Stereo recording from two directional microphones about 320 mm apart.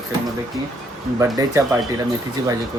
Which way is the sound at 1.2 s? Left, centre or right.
Centre.